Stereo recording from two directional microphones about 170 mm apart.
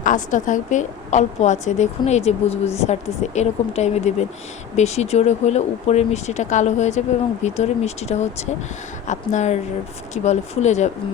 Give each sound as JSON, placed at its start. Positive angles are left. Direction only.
{"t": 0.0, "sound": "a woman's voice", "side_deg": 50}